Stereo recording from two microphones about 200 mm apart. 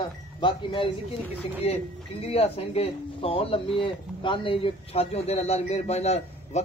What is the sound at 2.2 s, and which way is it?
Speech, 30° left (ahead or behind).